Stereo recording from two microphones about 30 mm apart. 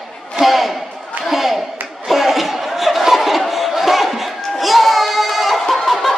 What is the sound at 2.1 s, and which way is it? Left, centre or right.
Chatter, centre.